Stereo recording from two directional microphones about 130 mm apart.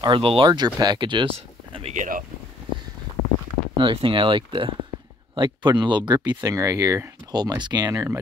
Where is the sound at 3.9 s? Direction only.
40° right (ahead or behind).